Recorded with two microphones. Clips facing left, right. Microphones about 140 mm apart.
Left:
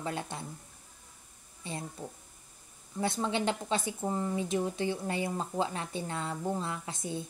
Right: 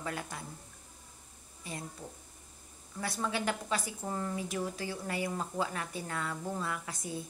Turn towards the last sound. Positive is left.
turn(degrees=25)  # may be behind; listen again after turning